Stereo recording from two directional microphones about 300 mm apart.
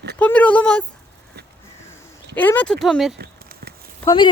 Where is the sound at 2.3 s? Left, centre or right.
Centre.